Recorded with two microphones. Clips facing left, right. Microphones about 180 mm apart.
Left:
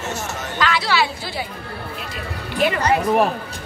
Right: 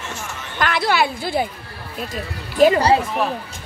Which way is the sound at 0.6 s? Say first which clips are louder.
Right 2 dB; 50° right (ahead or behind).